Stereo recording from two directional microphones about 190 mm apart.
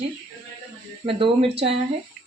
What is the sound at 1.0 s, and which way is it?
Speech, 30° right (ahead or behind).